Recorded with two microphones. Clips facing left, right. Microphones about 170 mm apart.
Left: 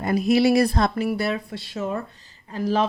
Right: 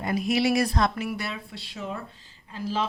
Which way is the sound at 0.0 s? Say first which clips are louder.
Left 6 dB; 40° left (ahead or behind).